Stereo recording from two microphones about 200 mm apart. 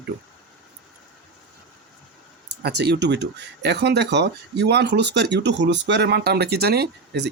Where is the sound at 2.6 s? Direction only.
55° right (ahead or behind).